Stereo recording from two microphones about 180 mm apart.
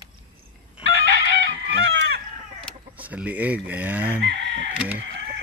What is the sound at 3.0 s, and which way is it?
Speech, 10° right (ahead or behind).